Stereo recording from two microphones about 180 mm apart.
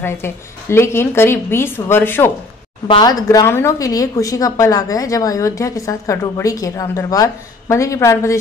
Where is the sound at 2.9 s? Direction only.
25° left (ahead or behind).